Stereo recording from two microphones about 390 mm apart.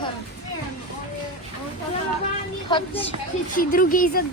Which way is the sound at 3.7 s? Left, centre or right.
Left.